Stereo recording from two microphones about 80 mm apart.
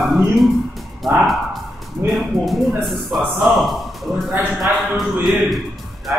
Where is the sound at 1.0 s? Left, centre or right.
Centre.